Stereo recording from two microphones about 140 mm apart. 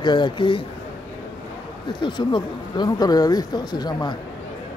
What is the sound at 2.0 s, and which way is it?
Speech, 35° left (ahead or behind).